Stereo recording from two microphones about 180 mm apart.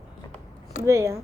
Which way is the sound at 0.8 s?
15° right (ahead or behind).